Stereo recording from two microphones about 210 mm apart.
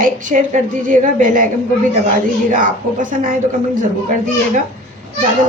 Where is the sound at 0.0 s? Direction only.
40° right (ahead or behind).